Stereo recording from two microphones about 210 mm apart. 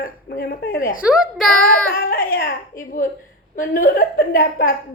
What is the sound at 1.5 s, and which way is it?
Child singing, 45° left (ahead or behind).